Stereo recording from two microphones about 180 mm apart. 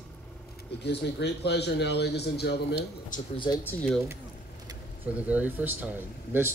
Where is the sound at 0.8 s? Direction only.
70° left (ahead or behind).